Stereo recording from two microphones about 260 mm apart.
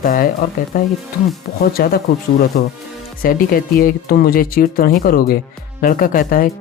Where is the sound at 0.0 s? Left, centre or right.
Left.